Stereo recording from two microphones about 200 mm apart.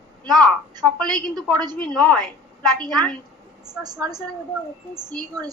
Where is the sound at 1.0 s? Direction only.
20° right (ahead or behind).